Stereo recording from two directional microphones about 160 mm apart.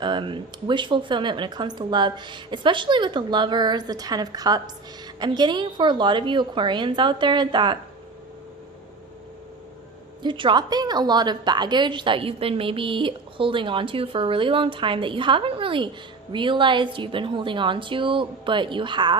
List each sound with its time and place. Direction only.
0.0 s speech: 30° right (ahead or behind)
10.2 s a woman's voice: 30° right (ahead or behind)